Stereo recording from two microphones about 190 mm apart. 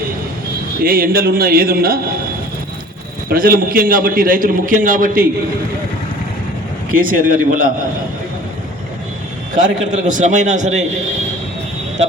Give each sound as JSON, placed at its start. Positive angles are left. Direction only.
{"t": 0.8, "sound": "a man's voice", "side_deg": -50}
{"t": 3.2, "sound": "a man's voice", "side_deg": -50}
{"t": 6.9, "sound": "a man's voice", "side_deg": -45}
{"t": 9.9, "sound": "a man's voice", "side_deg": -40}